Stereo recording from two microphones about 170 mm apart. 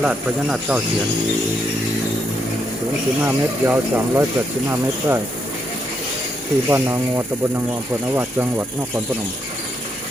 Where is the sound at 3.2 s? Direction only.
15° right (ahead or behind).